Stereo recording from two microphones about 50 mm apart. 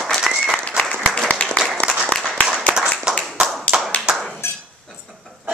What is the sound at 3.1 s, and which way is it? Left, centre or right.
Clapping, centre.